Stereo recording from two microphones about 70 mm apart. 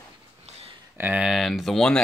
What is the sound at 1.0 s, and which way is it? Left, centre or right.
Speech, right.